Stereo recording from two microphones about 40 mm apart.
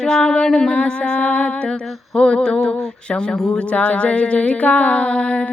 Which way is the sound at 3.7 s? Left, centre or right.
Left.